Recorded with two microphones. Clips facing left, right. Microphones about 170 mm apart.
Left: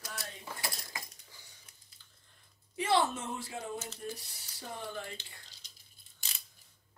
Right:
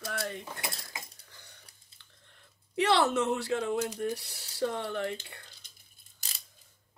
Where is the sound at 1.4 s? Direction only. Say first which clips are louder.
Right 4 dB; 65° right (ahead or behind).